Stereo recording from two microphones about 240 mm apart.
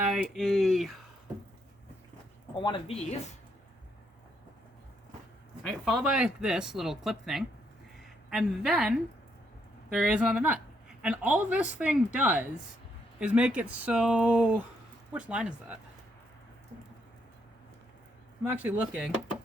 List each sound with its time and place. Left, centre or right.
0.1 s speech: centre
2.6 s speech: left
5.6 s a woman's voice: centre
18.4 s speech: centre